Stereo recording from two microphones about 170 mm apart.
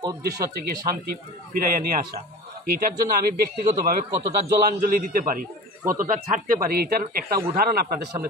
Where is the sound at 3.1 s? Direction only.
60° right (ahead or behind).